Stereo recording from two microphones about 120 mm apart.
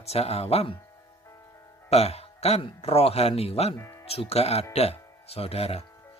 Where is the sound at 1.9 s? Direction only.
60° left (ahead or behind).